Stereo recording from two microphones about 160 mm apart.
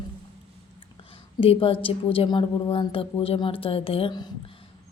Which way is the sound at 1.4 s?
35° left (ahead or behind).